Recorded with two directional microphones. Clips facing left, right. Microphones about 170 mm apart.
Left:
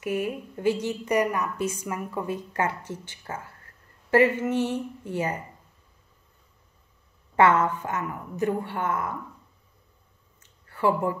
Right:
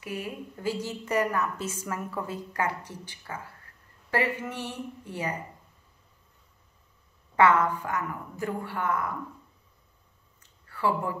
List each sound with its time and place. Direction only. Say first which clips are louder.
0.0 s a woman's voice: left 7 dB; 25° left (ahead or behind)
7.3 s a woman's voice: left 2 dB; 25° left (ahead or behind)
10.7 s speech: left 4 dB; 25° left (ahead or behind)